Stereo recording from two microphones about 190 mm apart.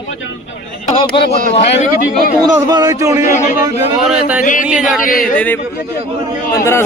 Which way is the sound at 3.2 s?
40° left (ahead or behind).